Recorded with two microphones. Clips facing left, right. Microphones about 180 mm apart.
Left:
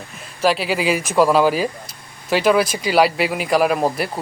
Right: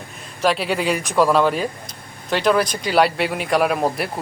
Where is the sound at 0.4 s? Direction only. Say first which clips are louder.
Left 1 dB; centre (ahead or behind).